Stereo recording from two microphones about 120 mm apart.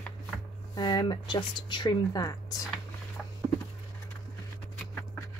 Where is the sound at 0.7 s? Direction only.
40° left (ahead or behind).